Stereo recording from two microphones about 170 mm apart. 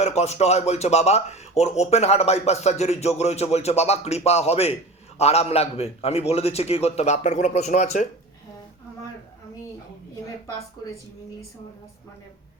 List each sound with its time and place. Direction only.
0.0 s speech: 40° left (ahead or behind)